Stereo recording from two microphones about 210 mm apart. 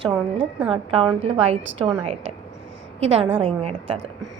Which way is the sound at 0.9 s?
25° right (ahead or behind).